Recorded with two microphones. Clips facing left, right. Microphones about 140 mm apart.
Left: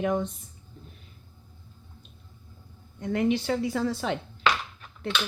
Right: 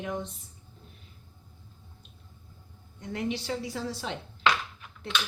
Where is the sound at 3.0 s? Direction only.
65° left (ahead or behind).